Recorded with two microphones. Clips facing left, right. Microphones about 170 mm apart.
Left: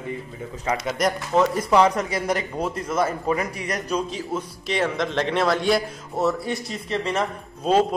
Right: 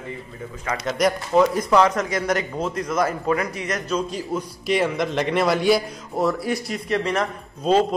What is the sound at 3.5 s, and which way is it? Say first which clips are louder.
Speech: right 2 dB; 35° left (ahead or behind).